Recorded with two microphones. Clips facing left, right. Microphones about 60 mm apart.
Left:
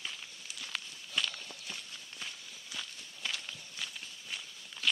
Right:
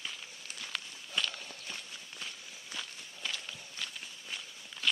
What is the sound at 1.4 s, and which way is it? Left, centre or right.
Walk, centre.